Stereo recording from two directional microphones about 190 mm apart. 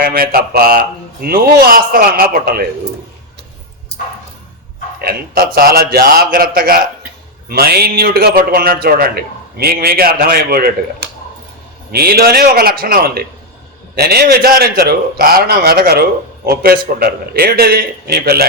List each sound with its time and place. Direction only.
0.0 s a man's voice: 50° right (ahead or behind)
4.9 s a man's voice: 55° right (ahead or behind)